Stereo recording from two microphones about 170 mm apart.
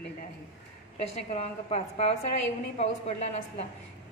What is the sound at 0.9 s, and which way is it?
A woman's voice, 40° left (ahead or behind).